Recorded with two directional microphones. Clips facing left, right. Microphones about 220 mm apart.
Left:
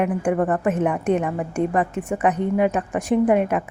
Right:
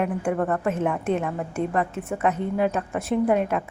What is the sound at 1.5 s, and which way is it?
Speech, 15° left (ahead or behind).